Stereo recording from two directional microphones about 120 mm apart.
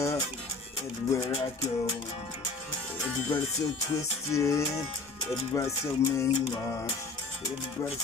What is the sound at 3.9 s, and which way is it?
Music, 25° left (ahead or behind).